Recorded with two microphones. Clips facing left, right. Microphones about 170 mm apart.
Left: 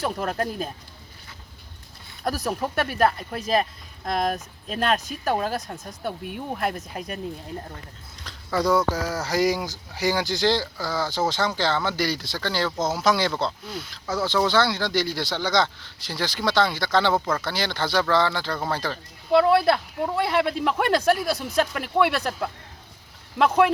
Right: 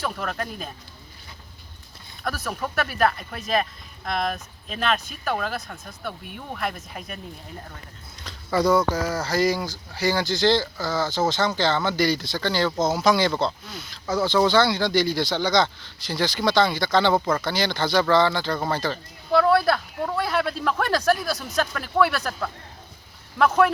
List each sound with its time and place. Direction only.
0.0 s speech: 35° left (ahead or behind)
2.2 s speech: 35° left (ahead or behind)
8.2 s speech: 5° right (ahead or behind)
19.3 s speech: 25° left (ahead or behind)
23.4 s speech: 20° left (ahead or behind)